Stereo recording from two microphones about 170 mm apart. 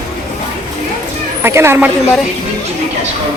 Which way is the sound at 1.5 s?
15° right (ahead or behind).